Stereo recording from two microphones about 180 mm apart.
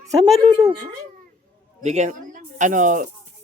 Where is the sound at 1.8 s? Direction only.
40° right (ahead or behind).